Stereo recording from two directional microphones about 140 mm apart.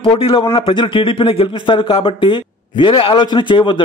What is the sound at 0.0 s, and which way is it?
Speech, 40° left (ahead or behind).